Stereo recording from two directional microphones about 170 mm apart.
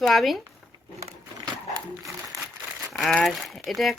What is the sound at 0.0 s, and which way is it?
Speech, centre (ahead or behind).